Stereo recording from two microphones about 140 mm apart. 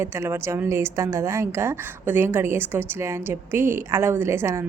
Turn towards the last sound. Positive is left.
turn(degrees=-20)  # may be behind; listen again after turning